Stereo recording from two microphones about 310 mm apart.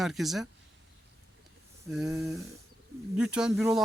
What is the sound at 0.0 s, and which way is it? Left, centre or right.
Speech, centre.